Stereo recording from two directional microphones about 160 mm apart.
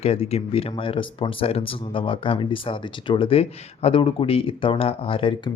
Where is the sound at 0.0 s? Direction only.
40° left (ahead or behind).